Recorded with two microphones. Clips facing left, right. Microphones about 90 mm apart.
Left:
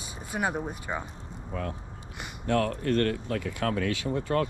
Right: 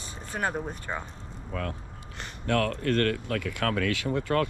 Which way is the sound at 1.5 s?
60° right (ahead or behind).